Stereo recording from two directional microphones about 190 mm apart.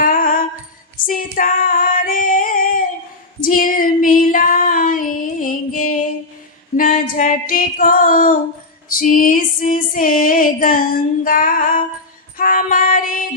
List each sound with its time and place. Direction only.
0.0 s music: 45° left (ahead or behind)
1.0 s female singing: 45° left (ahead or behind)
3.4 s child singing: 45° left (ahead or behind)
6.7 s female singing: 45° left (ahead or behind)
8.9 s music: 45° left (ahead or behind)